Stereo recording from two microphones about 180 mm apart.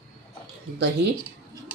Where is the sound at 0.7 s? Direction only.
70° right (ahead or behind).